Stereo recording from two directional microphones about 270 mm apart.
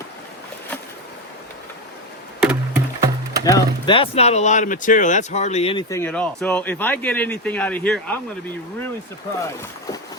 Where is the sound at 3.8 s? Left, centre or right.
Centre.